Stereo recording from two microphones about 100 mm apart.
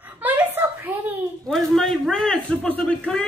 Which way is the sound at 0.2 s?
15° right (ahead or behind).